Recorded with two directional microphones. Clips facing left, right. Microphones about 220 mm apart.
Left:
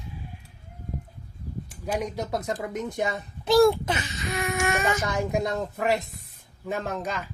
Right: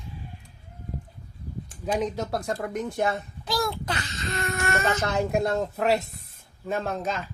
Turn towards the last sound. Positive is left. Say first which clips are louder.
# right 1 dB
turn(degrees=15)  # may be behind; listen again after turning